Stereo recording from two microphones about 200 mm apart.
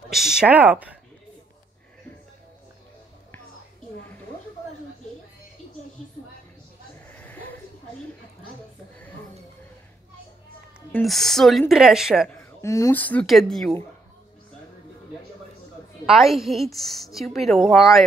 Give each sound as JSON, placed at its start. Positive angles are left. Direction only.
{"t": 0.1, "sound": "speech", "side_deg": 0}
{"t": 7.1, "sound": "a sound", "side_deg": 10}
{"t": 11.0, "sound": "a woman's voice", "side_deg": 0}
{"t": 12.4, "sound": "speech", "side_deg": 15}
{"t": 16.1, "sound": "a woman's voice", "side_deg": 0}